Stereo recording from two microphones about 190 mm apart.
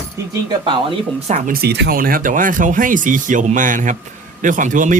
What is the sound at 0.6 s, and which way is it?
Speech, 25° right (ahead or behind).